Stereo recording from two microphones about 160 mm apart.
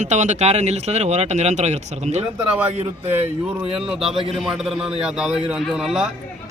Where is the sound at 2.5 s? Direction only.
10° right (ahead or behind).